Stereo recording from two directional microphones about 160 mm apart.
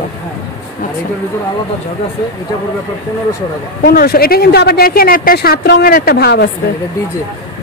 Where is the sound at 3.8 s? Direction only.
75° left (ahead or behind).